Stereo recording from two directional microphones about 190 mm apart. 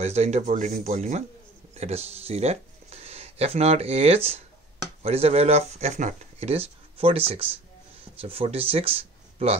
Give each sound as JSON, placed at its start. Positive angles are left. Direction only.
{"t": 0.0, "sound": "speech", "side_deg": -35}